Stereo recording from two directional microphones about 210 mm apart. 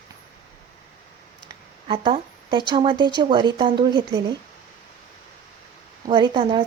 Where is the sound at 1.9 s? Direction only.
25° right (ahead or behind).